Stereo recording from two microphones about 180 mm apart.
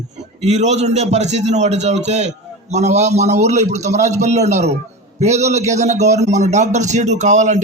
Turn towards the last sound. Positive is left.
turn(degrees=-40)  # may be behind; listen again after turning